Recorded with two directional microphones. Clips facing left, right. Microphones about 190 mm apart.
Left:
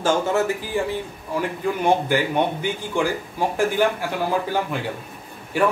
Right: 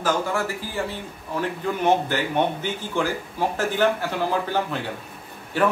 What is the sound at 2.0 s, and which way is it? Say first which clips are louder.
A man's voice: left 2 dB; 15° left (ahead or behind).